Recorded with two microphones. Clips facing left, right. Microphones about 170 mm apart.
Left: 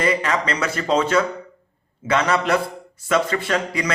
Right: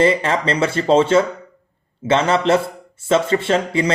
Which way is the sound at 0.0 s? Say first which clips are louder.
Right 5 dB; 30° right (ahead or behind).